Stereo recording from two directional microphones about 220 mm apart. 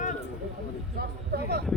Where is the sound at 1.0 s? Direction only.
45° right (ahead or behind).